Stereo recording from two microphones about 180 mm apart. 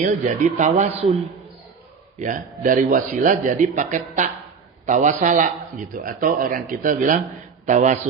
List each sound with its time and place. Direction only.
0.0 s a man's voice: 45° right (ahead or behind)
2.1 s a man's voice: 45° right (ahead or behind)